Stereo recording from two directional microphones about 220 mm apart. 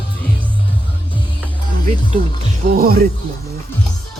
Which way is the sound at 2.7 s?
40° right (ahead or behind).